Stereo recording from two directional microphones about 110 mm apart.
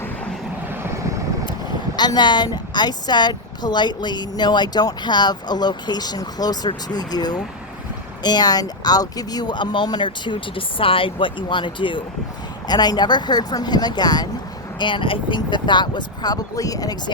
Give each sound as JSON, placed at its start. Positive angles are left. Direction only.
{"t": 0.7, "sound": "vehicle", "side_deg": -20}
{"t": 2.0, "sound": "a woman's voice", "side_deg": 40}